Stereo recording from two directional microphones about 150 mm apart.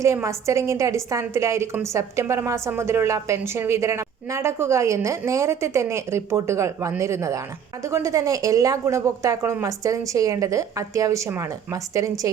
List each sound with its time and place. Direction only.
0.0 s a woman's voice: 20° right (ahead or behind)